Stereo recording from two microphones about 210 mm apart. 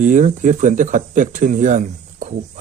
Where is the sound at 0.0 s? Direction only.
35° right (ahead or behind).